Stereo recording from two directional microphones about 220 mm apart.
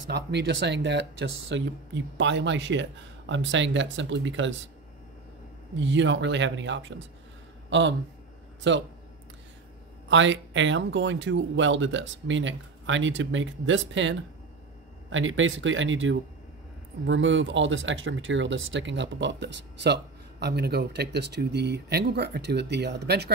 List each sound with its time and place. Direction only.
0.1 s speech: 50° right (ahead or behind)
5.8 s speech: 55° right (ahead or behind)
10.0 s speech: 60° right (ahead or behind)